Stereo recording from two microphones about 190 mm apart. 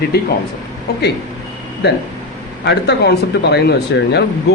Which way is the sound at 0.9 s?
60° left (ahead or behind).